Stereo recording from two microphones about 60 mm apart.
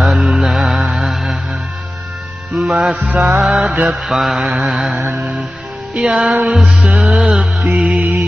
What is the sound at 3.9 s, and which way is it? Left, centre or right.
Mantra, centre.